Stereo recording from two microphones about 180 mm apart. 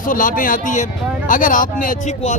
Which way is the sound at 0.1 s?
50° left (ahead or behind).